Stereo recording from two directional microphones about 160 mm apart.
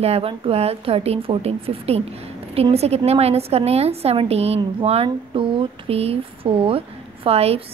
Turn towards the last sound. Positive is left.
turn(degrees=-40)  # may be behind; listen again after turning